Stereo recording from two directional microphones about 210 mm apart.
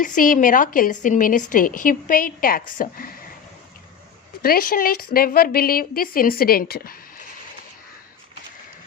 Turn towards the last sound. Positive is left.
turn(degrees=45)  # may be behind; listen again after turning